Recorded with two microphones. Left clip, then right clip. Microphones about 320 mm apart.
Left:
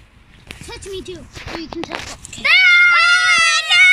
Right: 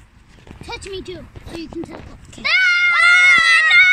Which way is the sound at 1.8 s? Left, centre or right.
Left.